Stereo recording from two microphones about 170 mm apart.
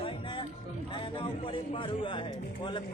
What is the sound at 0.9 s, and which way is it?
A man's voice, 30° left (ahead or behind).